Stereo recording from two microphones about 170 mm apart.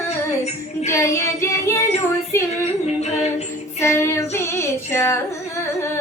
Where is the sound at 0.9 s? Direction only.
15° left (ahead or behind).